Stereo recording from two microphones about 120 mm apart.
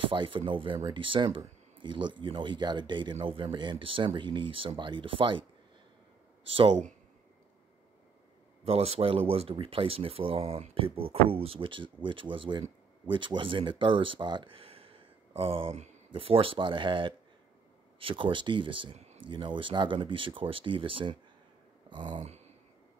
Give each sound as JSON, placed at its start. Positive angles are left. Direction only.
{"t": 0.0, "sound": "speech", "side_deg": -45}
{"t": 8.6, "sound": "speech", "side_deg": -55}
{"t": 21.8, "sound": "a sound", "side_deg": -40}